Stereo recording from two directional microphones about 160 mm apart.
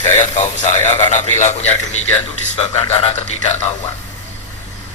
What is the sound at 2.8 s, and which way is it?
Speech, 35° left (ahead or behind).